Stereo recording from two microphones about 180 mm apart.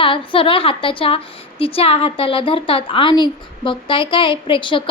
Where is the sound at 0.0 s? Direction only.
30° left (ahead or behind).